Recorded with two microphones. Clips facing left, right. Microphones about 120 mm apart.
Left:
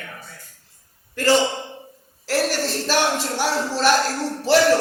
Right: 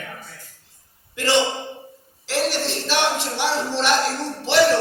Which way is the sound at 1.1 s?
40° left (ahead or behind).